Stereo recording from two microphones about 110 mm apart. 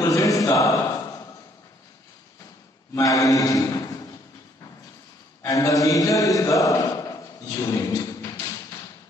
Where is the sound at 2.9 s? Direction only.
30° left (ahead or behind).